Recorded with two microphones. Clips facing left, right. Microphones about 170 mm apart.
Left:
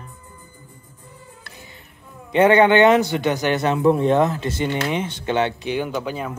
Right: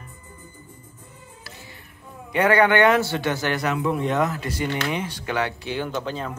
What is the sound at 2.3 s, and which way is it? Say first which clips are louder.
A man's voice: left 4 dB; 25° left (ahead or behind).